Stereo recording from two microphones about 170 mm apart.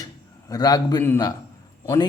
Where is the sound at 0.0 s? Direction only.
20° left (ahead or behind).